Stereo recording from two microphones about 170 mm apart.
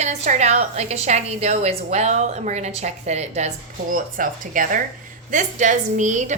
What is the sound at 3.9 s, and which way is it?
A woman's voice, 50° right (ahead or behind).